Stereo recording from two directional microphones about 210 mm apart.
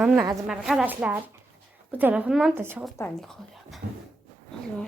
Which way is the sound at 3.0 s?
5° left (ahead or behind).